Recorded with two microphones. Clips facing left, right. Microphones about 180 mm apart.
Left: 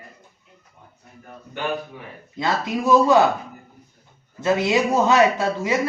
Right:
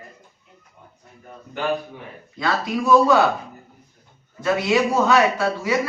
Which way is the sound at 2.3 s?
20° left (ahead or behind).